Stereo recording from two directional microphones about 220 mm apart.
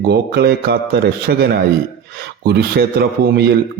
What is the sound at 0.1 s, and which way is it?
A man's voice, 45° right (ahead or behind).